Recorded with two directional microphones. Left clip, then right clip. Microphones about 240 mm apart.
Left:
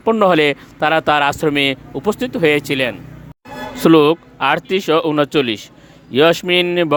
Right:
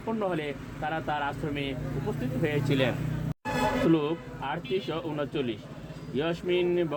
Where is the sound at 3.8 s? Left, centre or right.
Left.